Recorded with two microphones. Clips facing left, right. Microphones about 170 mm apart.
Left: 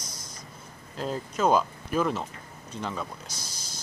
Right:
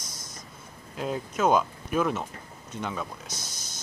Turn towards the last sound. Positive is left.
turn(degrees=-25)  # may be behind; listen again after turning